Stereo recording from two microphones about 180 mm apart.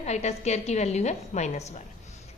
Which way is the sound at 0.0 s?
40° left (ahead or behind).